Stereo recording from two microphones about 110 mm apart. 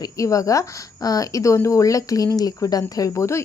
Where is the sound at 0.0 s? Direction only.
30° left (ahead or behind).